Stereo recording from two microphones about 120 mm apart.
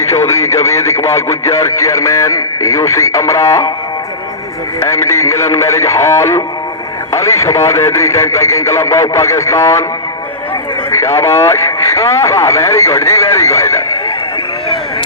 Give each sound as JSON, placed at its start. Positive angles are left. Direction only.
{"t": 0.3, "sound": "speech", "side_deg": 25}
{"t": 4.8, "sound": "speech", "side_deg": 25}
{"t": 10.9, "sound": "speech", "side_deg": 25}